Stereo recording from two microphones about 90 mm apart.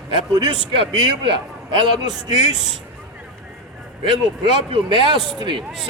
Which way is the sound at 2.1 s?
55° right (ahead or behind).